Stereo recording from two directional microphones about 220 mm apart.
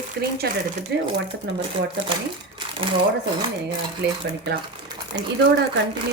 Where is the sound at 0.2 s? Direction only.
45° right (ahead or behind).